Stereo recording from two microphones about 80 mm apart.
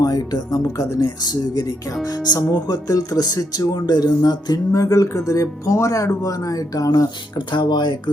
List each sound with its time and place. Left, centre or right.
0.0 s speech: left
7.3 s speech: left